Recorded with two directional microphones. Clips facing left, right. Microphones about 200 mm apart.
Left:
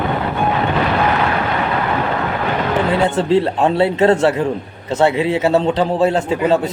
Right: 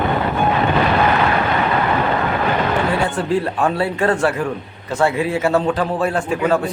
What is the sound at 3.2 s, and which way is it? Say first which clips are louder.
A man's voice: left 4 dB; 25° left (ahead or behind).